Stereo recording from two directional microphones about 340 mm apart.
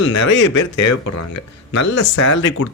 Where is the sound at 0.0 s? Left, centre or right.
Left.